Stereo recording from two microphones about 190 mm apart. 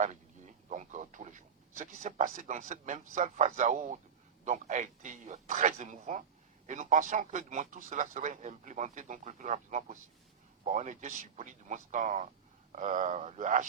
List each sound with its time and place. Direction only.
0.0 s a man's voice: 40° right (ahead or behind)